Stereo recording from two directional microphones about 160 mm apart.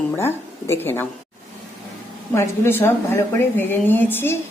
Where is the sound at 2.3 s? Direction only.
15° left (ahead or behind).